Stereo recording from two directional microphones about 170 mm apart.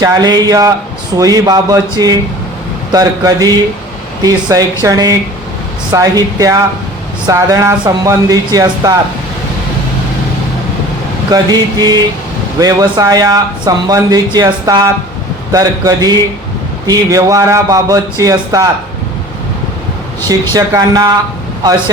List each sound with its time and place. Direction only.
0.0 s speech: 20° right (ahead or behind)
11.3 s speech: 25° right (ahead or behind)
20.5 s speech: 20° right (ahead or behind)